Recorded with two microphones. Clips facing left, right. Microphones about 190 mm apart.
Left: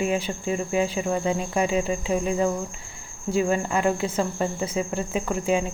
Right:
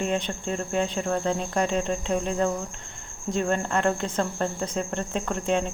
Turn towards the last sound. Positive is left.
turn(degrees=5)  # may be behind; listen again after turning